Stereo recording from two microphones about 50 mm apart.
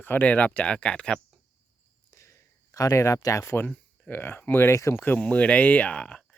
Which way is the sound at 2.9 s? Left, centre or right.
Left.